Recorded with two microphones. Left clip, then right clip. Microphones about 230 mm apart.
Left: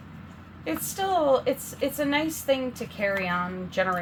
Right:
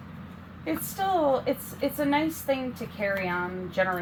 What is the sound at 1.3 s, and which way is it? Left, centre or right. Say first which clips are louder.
A woman's voice: left 3 dB; left.